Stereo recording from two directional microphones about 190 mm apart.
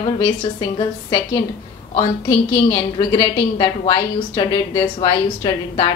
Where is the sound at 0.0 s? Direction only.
25° left (ahead or behind).